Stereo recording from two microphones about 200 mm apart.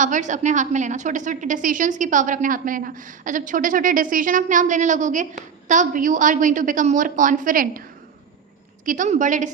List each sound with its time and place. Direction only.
0.0 s a woman's voice: 40° right (ahead or behind)